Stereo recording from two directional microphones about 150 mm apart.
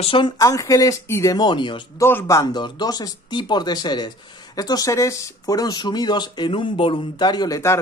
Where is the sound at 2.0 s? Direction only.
15° left (ahead or behind).